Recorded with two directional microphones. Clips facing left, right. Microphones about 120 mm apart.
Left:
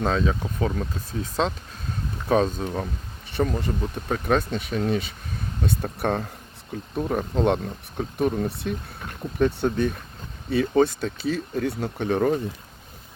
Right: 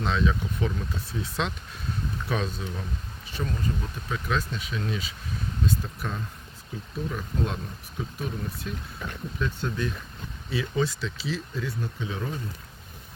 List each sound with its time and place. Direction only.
0.0 s speech: 40° left (ahead or behind)
3.3 s speech: 70° left (ahead or behind)
6.9 s speech: 50° left (ahead or behind)
7.3 s speech: 70° left (ahead or behind)
9.4 s speech: 60° left (ahead or behind)